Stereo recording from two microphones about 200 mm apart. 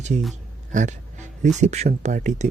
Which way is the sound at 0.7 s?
35° right (ahead or behind).